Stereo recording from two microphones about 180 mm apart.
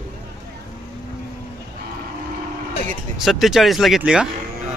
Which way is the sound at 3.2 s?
Centre (ahead or behind).